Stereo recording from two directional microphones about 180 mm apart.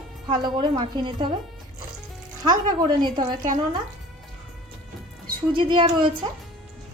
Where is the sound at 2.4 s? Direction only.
25° right (ahead or behind).